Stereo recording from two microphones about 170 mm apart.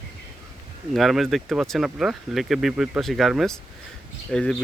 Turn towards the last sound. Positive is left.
turn(degrees=5)  # may be behind; listen again after turning